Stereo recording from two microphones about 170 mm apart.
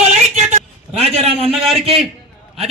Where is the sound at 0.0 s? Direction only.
40° right (ahead or behind).